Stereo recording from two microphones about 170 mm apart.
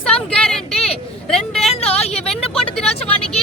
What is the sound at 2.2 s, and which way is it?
Vehicle, 5° left (ahead or behind).